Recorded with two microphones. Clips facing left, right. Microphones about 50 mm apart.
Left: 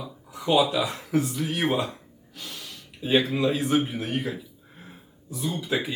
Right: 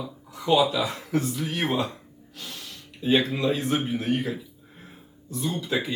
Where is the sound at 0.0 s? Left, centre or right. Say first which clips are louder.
Even; centre.